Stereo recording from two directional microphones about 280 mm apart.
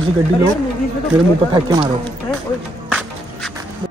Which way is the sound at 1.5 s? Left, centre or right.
Centre.